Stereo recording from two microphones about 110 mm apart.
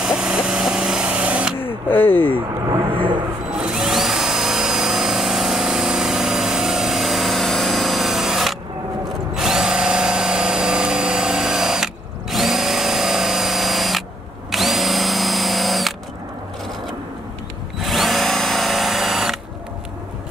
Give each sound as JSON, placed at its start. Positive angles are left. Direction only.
{"t": 0.0, "sound": "vehicle", "side_deg": -5}
{"t": 1.9, "sound": "speech", "side_deg": 20}
{"t": 2.9, "sound": "a sound", "side_deg": -45}
{"t": 3.4, "sound": "drill", "side_deg": -5}
{"t": 17.7, "sound": "drill", "side_deg": 0}